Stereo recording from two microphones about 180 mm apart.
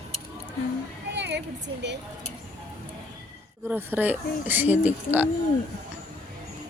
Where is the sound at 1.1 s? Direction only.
70° right (ahead or behind).